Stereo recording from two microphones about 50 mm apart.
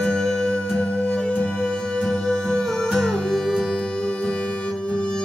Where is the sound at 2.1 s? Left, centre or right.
Centre.